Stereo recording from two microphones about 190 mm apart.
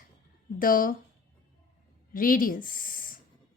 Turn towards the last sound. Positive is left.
turn(degrees=45)  # may be behind; listen again after turning